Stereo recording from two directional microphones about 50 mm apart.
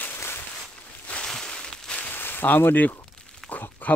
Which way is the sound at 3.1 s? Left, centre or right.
Centre.